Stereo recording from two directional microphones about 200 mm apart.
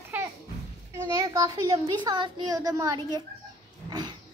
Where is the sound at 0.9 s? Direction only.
15° right (ahead or behind).